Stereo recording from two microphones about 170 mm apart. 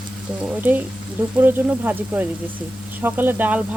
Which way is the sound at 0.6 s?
10° right (ahead or behind).